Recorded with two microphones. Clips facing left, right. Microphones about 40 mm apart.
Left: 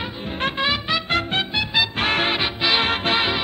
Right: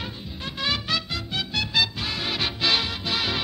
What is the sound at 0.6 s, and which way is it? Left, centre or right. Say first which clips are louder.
Music: left 2 dB; left.